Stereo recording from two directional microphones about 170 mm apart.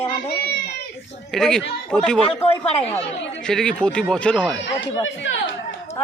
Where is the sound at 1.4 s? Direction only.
5° left (ahead or behind).